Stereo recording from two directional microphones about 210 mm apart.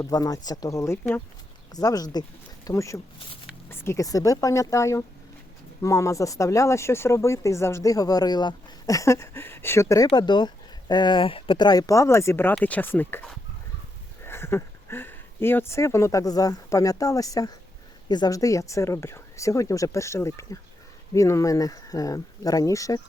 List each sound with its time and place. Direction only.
0.0 s speech: 15° left (ahead or behind)